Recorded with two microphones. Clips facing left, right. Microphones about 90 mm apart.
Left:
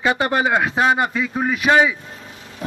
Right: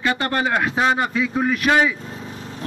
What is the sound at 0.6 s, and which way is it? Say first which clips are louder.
Speech: left 2 dB; centre (ahead or behind).